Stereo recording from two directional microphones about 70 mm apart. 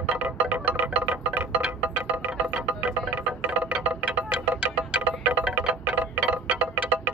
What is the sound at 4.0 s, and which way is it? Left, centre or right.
Wind chime, centre.